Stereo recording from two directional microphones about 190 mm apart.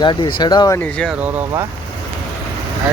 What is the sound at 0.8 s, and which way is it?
Speech, 5° left (ahead or behind).